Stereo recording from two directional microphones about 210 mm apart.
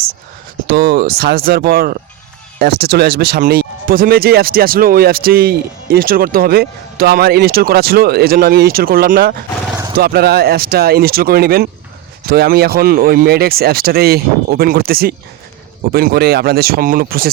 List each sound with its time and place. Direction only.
0.7 s speech: 45° right (ahead or behind)